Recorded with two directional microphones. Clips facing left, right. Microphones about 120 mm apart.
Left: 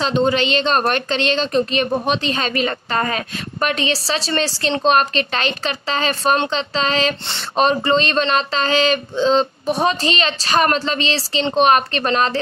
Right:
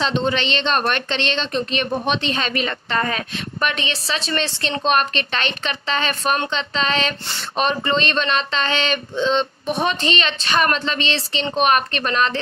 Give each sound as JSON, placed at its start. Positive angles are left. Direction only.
{"t": 0.0, "sound": "a woman's voice", "side_deg": 40}